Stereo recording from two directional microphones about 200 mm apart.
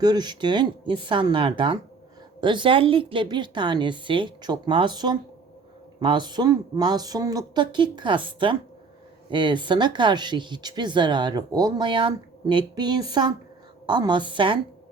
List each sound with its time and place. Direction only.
0.0 s speech: 20° right (ahead or behind)